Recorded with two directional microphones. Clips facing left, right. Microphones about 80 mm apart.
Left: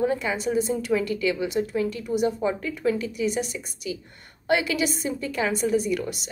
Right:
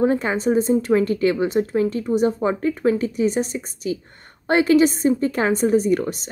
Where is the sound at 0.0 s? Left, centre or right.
Right.